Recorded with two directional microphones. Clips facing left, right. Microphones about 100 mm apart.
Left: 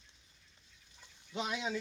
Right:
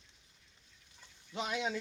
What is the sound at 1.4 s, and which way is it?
Speech, 5° left (ahead or behind).